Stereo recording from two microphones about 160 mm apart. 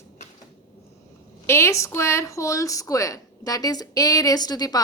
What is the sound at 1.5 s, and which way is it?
Speech, 15° left (ahead or behind).